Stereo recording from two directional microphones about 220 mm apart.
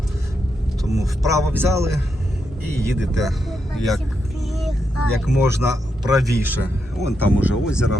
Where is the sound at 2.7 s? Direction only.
Centre (ahead or behind).